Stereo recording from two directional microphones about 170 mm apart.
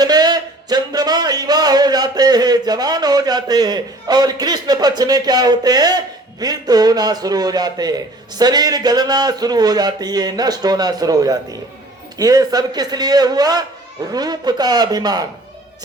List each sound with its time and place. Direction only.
0.0 s speech: 25° right (ahead or behind)